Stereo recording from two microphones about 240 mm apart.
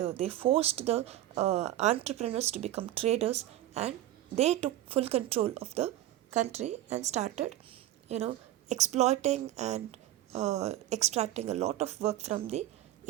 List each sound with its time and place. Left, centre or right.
0.0 s a woman's voice: right